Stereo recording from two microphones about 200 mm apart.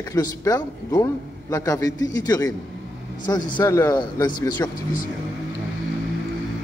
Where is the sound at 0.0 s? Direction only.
15° left (ahead or behind).